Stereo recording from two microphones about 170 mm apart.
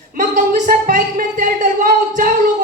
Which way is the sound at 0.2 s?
45° right (ahead or behind).